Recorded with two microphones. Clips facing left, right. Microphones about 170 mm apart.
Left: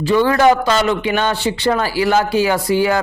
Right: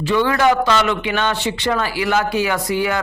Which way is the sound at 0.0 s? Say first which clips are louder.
Left 3 dB; 40° left (ahead or behind).